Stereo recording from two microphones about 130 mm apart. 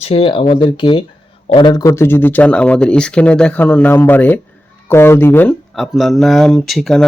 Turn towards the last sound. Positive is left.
turn(degrees=0)  # may be behind; listen again after turning